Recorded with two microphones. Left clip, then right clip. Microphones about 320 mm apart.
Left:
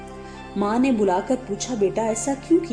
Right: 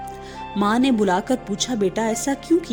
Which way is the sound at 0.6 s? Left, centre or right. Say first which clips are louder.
Right 1 dB; right.